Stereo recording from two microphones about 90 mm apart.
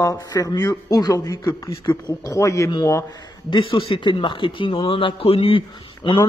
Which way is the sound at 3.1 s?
55° left (ahead or behind).